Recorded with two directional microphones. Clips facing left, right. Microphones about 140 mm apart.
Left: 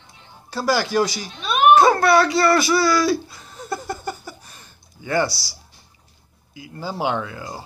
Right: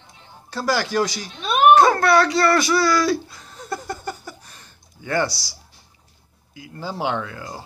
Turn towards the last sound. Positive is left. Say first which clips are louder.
# left 1 dB
turn(degrees=15)  # may be behind; listen again after turning